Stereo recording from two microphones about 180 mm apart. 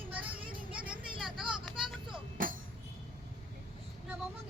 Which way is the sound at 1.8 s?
25° right (ahead or behind).